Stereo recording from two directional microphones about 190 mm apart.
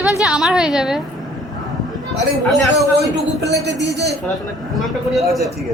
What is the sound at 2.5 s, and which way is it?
A woman's voice, centre (ahead or behind).